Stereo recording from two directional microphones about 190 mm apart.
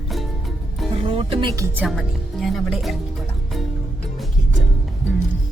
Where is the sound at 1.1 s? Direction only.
30° right (ahead or behind).